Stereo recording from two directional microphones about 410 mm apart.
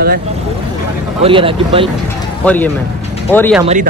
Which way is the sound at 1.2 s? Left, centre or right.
Centre.